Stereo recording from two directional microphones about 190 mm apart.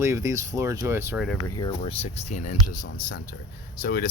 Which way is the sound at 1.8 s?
30° left (ahead or behind).